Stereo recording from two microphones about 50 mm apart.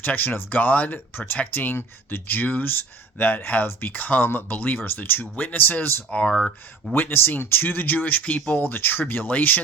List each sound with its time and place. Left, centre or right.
0.0 s speech: left
6.1 s speech: left
6.9 s speech: left